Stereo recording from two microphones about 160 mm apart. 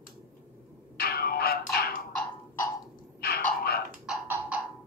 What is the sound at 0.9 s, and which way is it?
Music, 75° left (ahead or behind).